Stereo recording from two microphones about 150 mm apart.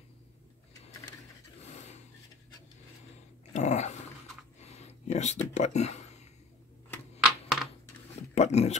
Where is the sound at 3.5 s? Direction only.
50° left (ahead or behind).